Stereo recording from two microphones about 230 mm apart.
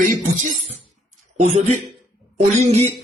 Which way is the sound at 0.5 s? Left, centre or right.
Left.